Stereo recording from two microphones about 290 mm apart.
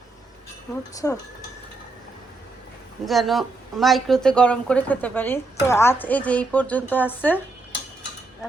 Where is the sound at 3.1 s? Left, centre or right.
Centre.